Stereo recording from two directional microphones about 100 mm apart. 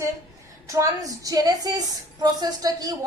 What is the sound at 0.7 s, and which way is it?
A woman's voice, 35° right (ahead or behind).